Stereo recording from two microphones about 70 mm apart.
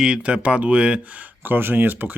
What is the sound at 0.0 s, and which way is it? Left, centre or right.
Speech, centre.